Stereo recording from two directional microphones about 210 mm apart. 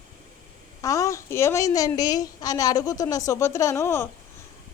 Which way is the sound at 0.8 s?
15° left (ahead or behind).